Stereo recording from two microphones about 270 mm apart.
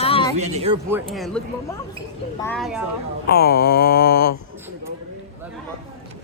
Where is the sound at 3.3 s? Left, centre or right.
Left.